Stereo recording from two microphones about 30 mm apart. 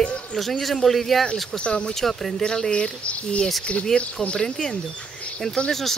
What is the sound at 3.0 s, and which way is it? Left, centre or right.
Speech, left.